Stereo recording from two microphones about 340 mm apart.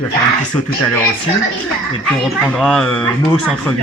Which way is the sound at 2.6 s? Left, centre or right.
Centre.